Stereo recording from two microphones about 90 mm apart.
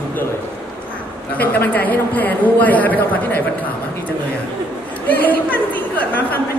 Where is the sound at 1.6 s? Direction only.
20° left (ahead or behind).